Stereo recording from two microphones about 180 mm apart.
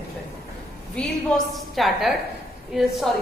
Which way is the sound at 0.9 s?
5° left (ahead or behind).